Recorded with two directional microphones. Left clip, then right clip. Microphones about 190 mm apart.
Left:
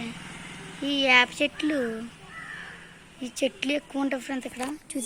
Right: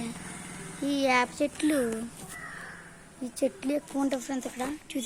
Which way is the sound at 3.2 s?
Centre (ahead or behind).